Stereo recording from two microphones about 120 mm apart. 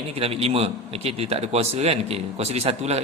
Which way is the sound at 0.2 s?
55° right (ahead or behind).